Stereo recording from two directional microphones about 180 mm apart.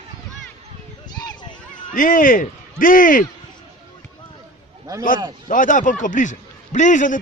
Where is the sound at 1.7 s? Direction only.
45° left (ahead or behind).